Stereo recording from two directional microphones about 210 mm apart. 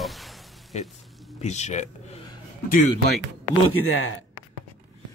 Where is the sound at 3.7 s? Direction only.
85° left.